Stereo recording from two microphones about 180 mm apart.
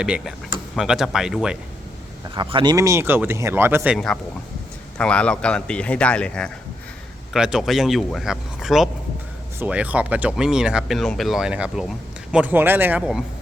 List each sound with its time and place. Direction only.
0.0 s speech: 5° right (ahead or behind)
2.3 s speech: 25° right (ahead or behind)
3.9 s speech: 5° left (ahead or behind)